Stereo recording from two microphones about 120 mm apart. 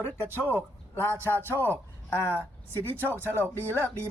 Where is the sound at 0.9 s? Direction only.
20° left (ahead or behind).